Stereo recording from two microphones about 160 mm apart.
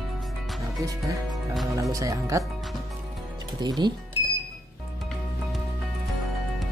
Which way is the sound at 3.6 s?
30° right (ahead or behind).